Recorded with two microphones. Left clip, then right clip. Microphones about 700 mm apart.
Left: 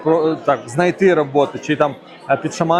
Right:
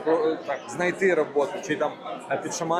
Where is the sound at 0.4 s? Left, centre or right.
Left.